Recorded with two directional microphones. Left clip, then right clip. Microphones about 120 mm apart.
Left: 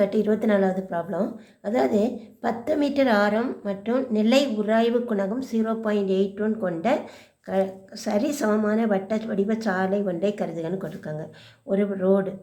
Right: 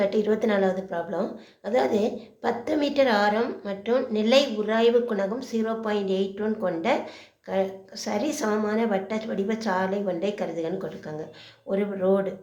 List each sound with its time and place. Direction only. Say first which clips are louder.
0.0 s a woman's voice: left 1 dB; 35° left (ahead or behind)
11.7 s a woman's voice: left 2 dB; 25° left (ahead or behind)